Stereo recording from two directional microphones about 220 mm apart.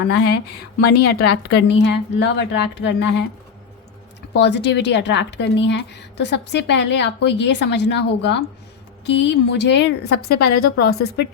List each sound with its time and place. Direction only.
0.0 s a woman's voice: 50° left (ahead or behind)
4.4 s a woman's voice: 50° left (ahead or behind)